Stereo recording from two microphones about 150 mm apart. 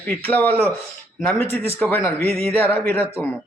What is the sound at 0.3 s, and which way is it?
A man's voice, 10° left (ahead or behind).